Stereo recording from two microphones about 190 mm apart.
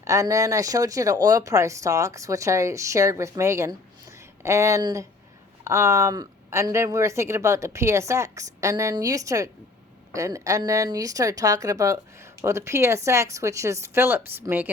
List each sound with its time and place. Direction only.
0.0 s speech: 15° right (ahead or behind)